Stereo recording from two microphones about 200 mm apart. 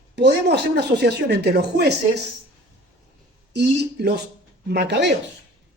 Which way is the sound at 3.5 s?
55° right (ahead or behind).